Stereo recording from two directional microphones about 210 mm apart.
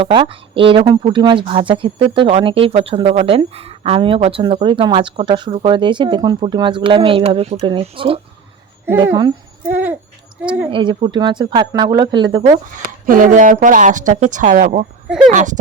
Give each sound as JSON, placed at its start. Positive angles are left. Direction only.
{"t": 0.0, "sound": "speech", "side_deg": -25}
{"t": 8.9, "sound": "speech", "side_deg": -15}
{"t": 10.4, "sound": "speech", "side_deg": -5}
{"t": 10.7, "sound": "speech", "side_deg": -25}
{"t": 12.7, "sound": "speech", "side_deg": -40}